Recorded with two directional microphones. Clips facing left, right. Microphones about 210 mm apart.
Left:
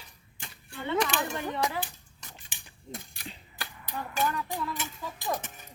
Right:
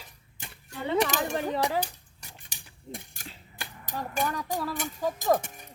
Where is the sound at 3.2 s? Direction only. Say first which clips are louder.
Left 2 dB; 45° right (ahead or behind).